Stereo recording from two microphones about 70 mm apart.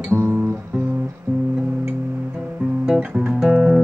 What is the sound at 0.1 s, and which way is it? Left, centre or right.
Guitar, right.